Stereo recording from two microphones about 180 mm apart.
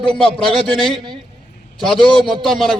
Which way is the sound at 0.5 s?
Centre (ahead or behind).